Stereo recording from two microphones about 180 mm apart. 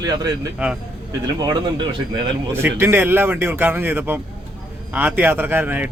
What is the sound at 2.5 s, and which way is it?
Speech, 15° right (ahead or behind).